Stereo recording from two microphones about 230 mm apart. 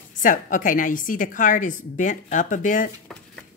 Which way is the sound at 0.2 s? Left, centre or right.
Left.